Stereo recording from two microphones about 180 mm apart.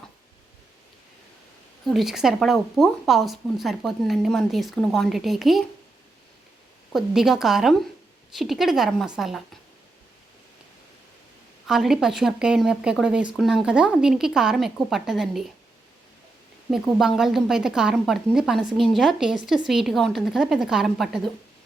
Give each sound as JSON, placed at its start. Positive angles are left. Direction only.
{"t": 1.8, "sound": "speech", "side_deg": 0}
{"t": 6.9, "sound": "speech", "side_deg": 0}
{"t": 11.7, "sound": "speech", "side_deg": 0}
{"t": 16.7, "sound": "speech", "side_deg": 0}